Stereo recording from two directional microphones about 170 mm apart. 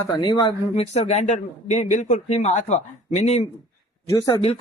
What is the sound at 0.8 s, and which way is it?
Speech, 40° left (ahead or behind).